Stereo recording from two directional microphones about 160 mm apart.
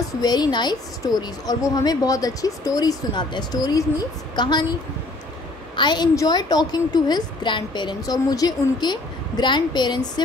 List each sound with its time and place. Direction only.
0.2 s a woman's voice: 25° left (ahead or behind)
5.8 s a woman's voice: 25° left (ahead or behind)